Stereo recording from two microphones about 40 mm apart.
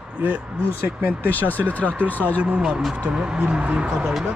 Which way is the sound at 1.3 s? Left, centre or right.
Left.